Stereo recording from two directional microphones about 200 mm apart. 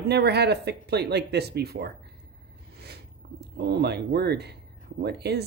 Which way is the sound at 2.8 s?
55° right (ahead or behind).